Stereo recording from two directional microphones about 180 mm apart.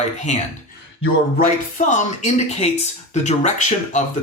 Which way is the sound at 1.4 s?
45° left (ahead or behind).